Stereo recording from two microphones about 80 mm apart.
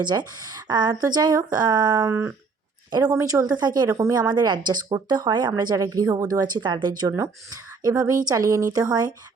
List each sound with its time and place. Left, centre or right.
0.0 s speech: right
2.0 s a sound: right
2.9 s speech: right
3.6 s speech: right
7.2 s speech: right